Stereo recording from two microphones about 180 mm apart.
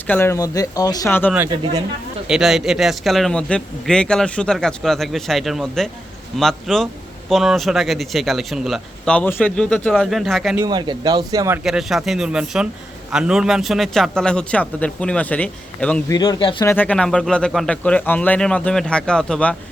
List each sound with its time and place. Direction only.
0.1 s speech: 15° left (ahead or behind)
2.2 s speech: centre (ahead or behind)
10.6 s speech: 25° right (ahead or behind)
11.6 s speech: centre (ahead or behind)
16.1 s speech: 25° left (ahead or behind)
16.6 s speech: 10° left (ahead or behind)